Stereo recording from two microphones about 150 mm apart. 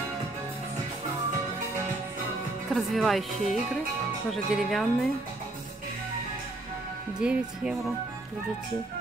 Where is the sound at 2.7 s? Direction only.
Centre (ahead or behind).